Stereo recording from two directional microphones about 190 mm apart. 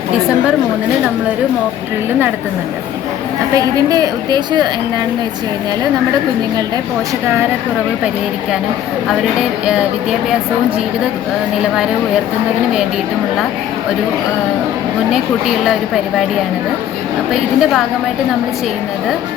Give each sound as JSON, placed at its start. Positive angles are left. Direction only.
{"t": 3.5, "sound": "a woman's voice", "side_deg": -20}
{"t": 9.6, "sound": "a woman's voice", "side_deg": -5}
{"t": 15.1, "sound": "a woman's voice", "side_deg": 0}
{"t": 17.3, "sound": "a woman's voice", "side_deg": 0}